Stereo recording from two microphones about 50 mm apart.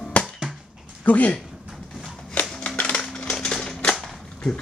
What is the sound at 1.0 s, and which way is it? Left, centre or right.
Speech, left.